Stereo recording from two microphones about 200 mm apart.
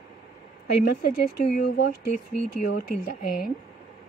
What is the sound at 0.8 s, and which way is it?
Speech, 45° left (ahead or behind).